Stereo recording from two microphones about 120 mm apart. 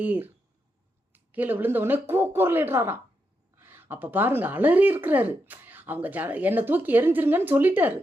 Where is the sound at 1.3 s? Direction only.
15° right (ahead or behind).